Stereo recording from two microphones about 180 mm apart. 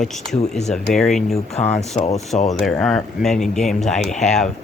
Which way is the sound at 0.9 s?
Centre (ahead or behind).